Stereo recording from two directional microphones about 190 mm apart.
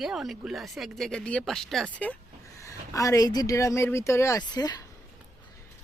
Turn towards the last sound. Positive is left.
turn(degrees=20)  # may be behind; listen again after turning